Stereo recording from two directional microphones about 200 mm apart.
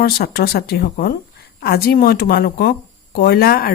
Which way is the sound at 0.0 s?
50° left (ahead or behind).